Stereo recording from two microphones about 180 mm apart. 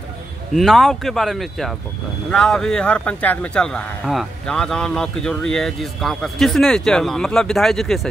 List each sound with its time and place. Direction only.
0.6 s speech: centre (ahead or behind)